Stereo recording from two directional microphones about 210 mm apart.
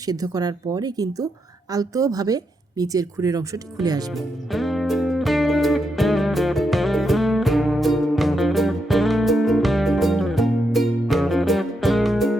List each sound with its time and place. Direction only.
0.0 s speech: 15° right (ahead or behind)
4.5 s music: centre (ahead or behind)